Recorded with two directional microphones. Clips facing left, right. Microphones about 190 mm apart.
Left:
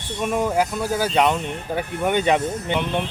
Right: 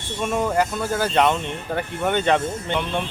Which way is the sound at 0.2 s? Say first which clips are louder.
Even; 10° left (ahead or behind).